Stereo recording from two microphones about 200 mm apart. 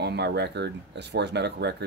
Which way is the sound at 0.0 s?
55° right (ahead or behind).